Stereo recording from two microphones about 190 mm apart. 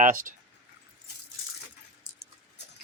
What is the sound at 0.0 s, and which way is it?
Speech, 45° right (ahead or behind).